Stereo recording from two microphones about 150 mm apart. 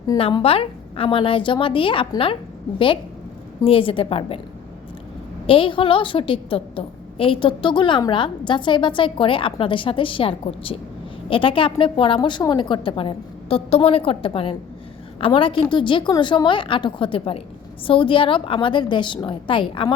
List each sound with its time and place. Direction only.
0.2 s a woman's voice: 35° left (ahead or behind)
5.5 s a woman's voice: 35° left (ahead or behind)